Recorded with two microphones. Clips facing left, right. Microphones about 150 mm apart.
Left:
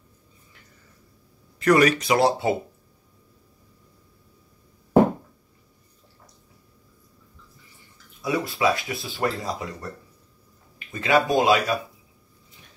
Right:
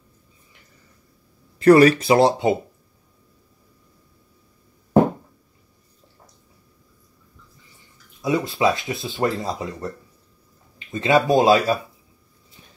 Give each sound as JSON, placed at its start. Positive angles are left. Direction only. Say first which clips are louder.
{"t": 1.6, "sound": "speech", "louder": "right 6 dB", "side_deg": -30}
{"t": 8.2, "sound": "speech", "louder": "right 3 dB", "side_deg": -20}
{"t": 10.9, "sound": "speech", "louder": "right 3 dB", "side_deg": -25}